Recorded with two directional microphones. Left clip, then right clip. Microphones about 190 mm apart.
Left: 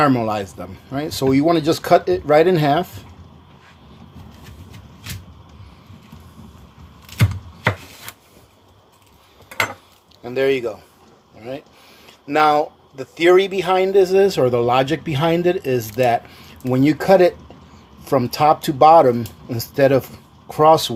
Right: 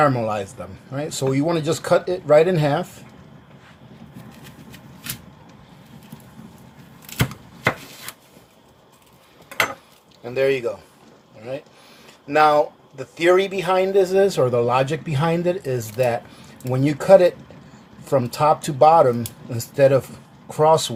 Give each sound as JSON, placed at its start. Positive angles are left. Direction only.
{"t": 0.0, "sound": "speech", "side_deg": 40}
{"t": 10.2, "sound": "speech", "side_deg": 40}